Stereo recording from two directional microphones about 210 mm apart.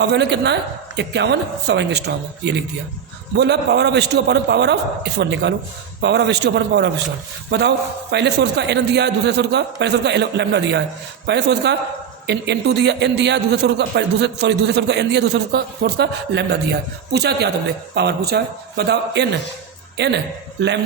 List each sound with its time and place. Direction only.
0.0 s a man's voice: 55° right (ahead or behind)